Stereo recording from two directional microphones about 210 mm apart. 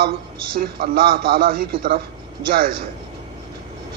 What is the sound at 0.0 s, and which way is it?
A man's voice, 45° right (ahead or behind).